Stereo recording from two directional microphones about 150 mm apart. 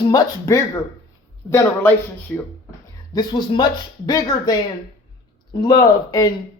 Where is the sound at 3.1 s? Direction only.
30° left (ahead or behind).